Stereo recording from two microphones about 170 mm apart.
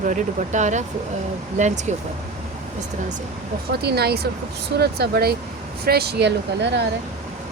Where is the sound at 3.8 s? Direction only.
70° right (ahead or behind).